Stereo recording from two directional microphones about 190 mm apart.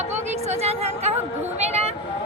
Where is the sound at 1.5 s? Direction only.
35° right (ahead or behind).